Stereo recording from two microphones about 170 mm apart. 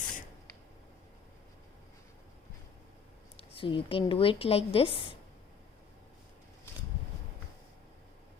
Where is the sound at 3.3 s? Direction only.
30° left (ahead or behind).